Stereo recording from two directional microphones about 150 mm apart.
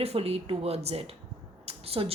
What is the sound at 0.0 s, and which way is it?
Speech, 45° right (ahead or behind).